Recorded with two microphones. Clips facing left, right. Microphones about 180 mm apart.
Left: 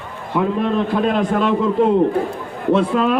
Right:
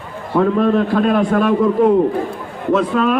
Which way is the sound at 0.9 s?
20° left (ahead or behind).